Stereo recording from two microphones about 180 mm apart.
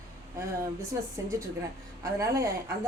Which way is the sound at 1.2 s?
15° right (ahead or behind).